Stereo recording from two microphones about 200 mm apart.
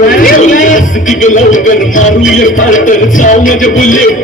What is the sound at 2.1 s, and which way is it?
A man's voice, 40° left (ahead or behind).